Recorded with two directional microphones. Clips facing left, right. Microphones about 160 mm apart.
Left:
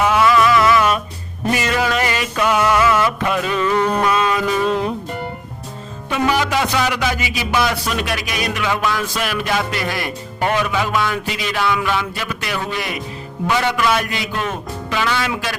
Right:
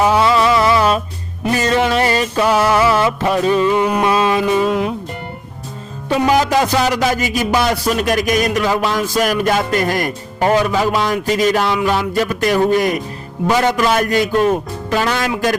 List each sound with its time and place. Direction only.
0.0 s music: 30° right (ahead or behind)
3.7 s speech: 10° right (ahead or behind)
4.0 s a sound: 30° right (ahead or behind)
4.6 s speech: 5° right (ahead or behind)
6.1 s music: 35° right (ahead or behind)